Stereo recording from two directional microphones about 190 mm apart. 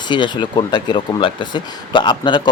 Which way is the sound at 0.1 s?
25° left (ahead or behind).